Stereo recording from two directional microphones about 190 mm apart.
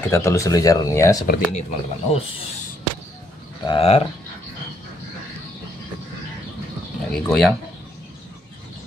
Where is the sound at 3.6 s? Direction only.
30° left (ahead or behind).